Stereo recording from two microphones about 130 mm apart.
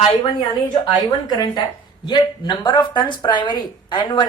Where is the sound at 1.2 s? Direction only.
35° left (ahead or behind).